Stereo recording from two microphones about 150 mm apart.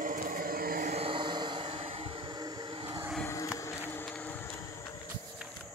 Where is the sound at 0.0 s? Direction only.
65° right (ahead or behind).